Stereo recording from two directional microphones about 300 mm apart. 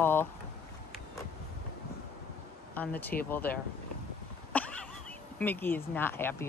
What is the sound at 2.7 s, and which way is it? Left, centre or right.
Speech, centre.